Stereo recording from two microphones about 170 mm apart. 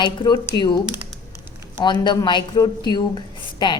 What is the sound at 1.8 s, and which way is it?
A woman's voice, 25° left (ahead or behind).